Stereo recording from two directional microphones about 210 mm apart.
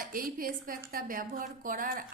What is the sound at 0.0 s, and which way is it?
A woman's voice, 40° right (ahead or behind).